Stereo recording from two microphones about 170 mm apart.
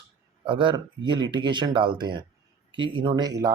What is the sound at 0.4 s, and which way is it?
Speech, 30° right (ahead or behind).